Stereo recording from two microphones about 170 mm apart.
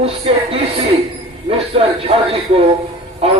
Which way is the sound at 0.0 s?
35° right (ahead or behind).